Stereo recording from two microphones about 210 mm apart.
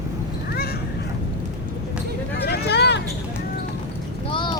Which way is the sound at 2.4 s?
50° left (ahead or behind).